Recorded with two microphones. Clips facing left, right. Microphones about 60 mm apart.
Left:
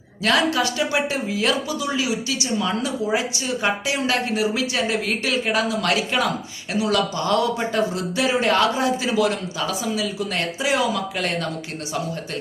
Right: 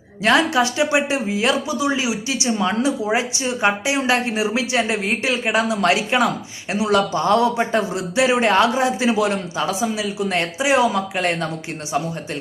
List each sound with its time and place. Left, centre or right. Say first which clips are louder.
0.2 s speech: right 3 dB; right